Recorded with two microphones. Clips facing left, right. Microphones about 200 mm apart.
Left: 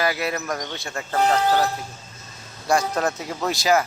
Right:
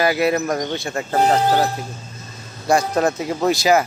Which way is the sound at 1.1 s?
35° right (ahead or behind).